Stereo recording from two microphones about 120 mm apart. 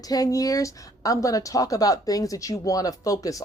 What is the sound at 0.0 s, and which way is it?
Speech, 30° left (ahead or behind).